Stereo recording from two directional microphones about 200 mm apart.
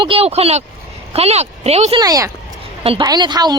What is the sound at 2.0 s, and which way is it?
A woman's voice, 15° right (ahead or behind).